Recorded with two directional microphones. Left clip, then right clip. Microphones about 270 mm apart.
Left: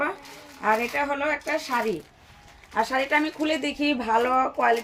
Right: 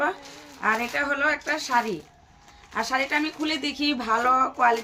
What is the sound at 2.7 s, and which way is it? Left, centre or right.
A woman's voice, centre.